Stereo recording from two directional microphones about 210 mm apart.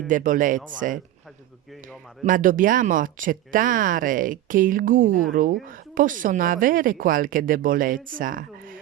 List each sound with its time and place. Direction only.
0.1 s speech: 40° right (ahead or behind)
2.2 s speech: 40° right (ahead or behind)